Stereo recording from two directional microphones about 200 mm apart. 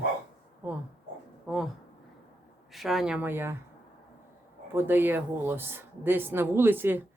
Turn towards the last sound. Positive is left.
turn(degrees=-10)  # may be behind; listen again after turning